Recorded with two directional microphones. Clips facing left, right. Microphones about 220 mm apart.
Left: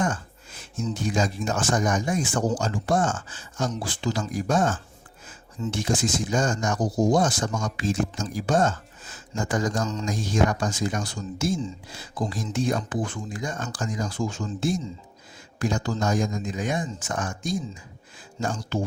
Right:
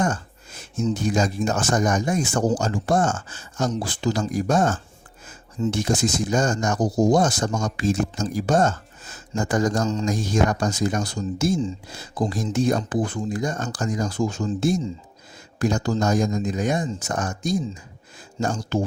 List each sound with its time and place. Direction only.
0.9 s speech: 40° right (ahead or behind)